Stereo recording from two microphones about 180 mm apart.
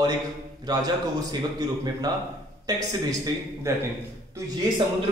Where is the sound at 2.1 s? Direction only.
20° right (ahead or behind).